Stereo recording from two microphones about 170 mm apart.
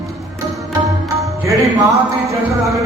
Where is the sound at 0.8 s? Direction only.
20° right (ahead or behind).